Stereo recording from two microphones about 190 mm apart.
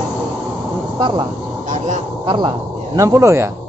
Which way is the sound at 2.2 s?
25° right (ahead or behind).